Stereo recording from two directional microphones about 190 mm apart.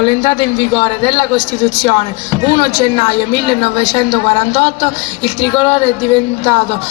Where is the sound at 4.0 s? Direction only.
25° left (ahead or behind).